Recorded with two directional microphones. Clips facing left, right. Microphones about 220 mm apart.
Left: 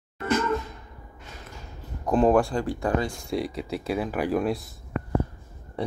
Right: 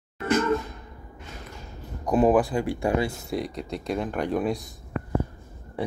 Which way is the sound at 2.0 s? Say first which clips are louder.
Even; 10° right (ahead or behind).